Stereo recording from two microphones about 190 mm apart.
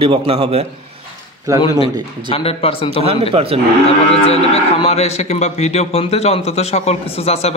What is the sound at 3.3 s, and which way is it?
Speech, 30° right (ahead or behind).